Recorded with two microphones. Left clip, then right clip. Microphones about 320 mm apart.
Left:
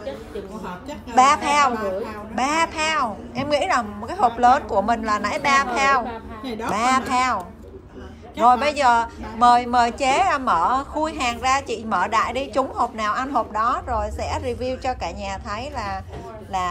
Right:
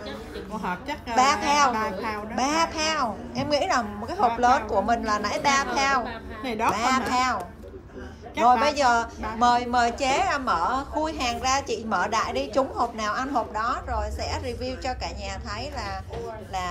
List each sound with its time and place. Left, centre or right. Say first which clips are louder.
1.1 s a woman's voice: left 5 dB; centre
6.4 s a woman's voice: right 5 dB; centre
6.7 s speech: left 5 dB; centre
8.4 s a woman's voice: left 3 dB; centre